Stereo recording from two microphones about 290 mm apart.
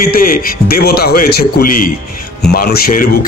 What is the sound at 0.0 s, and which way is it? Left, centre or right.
A man's voice, left.